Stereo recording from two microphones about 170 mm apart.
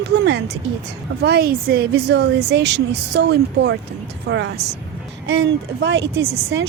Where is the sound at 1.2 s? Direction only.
70° right (ahead or behind).